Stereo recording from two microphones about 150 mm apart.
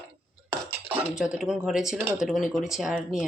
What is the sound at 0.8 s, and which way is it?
Speech, 10° right (ahead or behind).